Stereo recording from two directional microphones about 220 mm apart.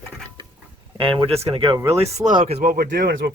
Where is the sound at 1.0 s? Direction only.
25° right (ahead or behind).